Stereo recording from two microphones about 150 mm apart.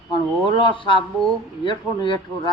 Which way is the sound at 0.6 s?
35° left (ahead or behind).